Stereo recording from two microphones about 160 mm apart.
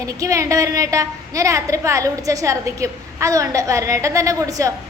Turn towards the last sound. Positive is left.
turn(degrees=-20)  # may be behind; listen again after turning